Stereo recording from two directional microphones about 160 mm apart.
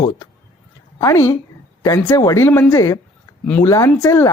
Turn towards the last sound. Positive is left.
turn(degrees=20)  # may be behind; listen again after turning